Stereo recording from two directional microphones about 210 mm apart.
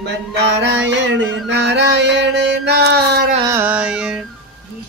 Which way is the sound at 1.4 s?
55° right (ahead or behind).